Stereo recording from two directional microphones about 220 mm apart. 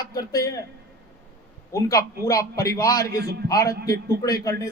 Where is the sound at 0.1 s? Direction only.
15° left (ahead or behind).